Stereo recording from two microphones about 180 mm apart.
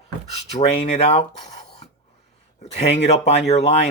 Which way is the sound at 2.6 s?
35° left (ahead or behind).